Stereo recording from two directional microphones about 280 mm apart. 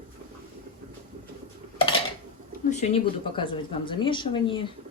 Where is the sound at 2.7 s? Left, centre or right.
Left.